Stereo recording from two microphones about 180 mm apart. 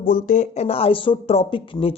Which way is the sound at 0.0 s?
45° left (ahead or behind).